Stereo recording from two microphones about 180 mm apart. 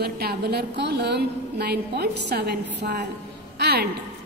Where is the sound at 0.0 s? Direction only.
60° right (ahead or behind).